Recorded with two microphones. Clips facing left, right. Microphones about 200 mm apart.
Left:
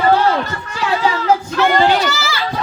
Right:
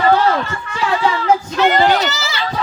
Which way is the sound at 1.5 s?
20° right (ahead or behind).